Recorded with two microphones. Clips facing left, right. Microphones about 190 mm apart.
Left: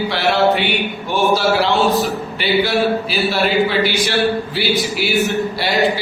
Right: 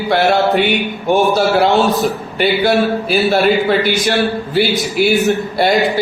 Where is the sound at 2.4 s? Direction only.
50° right (ahead or behind).